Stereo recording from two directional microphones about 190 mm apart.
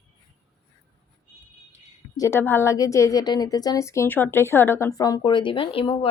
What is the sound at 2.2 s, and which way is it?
A woman's voice, 10° left (ahead or behind).